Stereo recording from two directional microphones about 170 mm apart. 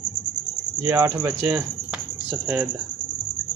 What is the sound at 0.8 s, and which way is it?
Speech, 10° right (ahead or behind).